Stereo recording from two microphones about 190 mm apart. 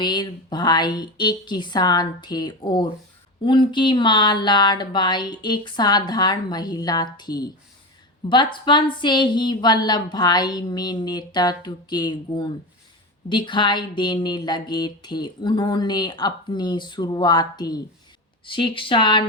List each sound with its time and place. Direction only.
0.0 s speech: 20° left (ahead or behind)